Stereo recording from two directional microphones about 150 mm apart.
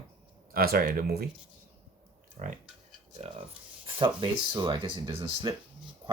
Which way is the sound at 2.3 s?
55° right (ahead or behind).